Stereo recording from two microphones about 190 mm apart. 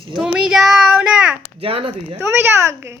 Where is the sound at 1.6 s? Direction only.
30° right (ahead or behind).